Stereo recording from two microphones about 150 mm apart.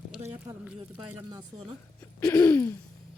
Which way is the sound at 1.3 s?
25° right (ahead or behind).